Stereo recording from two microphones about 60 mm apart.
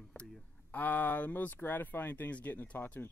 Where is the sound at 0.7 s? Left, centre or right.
Left.